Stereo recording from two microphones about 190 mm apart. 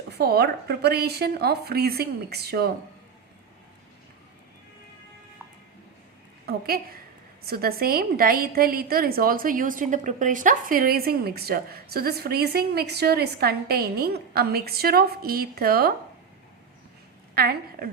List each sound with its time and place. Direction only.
0.1 s a woman's voice: 60° right (ahead or behind)
6.4 s a woman's voice: 55° right (ahead or behind)
17.3 s a woman's voice: 55° right (ahead or behind)